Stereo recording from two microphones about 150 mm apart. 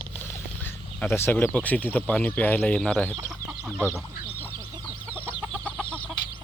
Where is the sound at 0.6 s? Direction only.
15° left (ahead or behind).